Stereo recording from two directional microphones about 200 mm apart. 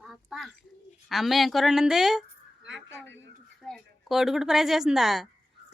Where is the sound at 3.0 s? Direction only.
65° right (ahead or behind).